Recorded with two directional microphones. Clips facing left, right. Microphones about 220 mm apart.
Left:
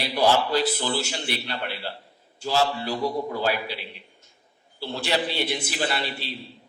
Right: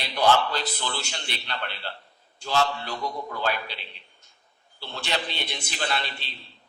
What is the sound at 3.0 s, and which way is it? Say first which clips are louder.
Speech: left 8 dB; 30° left (ahead or behind).